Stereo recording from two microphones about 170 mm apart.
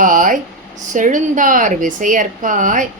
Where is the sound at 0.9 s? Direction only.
50° right (ahead or behind).